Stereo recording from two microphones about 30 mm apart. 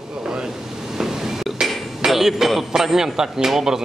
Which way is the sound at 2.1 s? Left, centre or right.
Centre.